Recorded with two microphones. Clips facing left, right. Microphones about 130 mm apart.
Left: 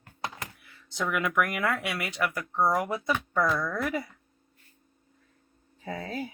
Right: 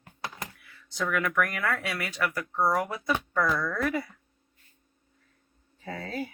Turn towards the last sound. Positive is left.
turn(degrees=20)  # may be behind; listen again after turning